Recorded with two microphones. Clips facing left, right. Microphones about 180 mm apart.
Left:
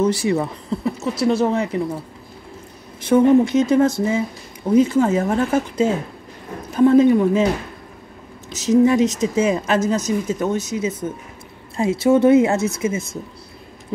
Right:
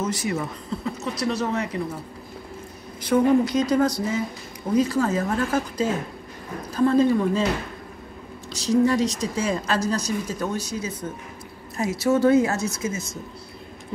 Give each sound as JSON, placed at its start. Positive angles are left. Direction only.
{"t": 0.0, "sound": "a woman's voice", "side_deg": 30}
{"t": 3.0, "sound": "a woman's voice", "side_deg": 25}
{"t": 8.5, "sound": "a woman's voice", "side_deg": 20}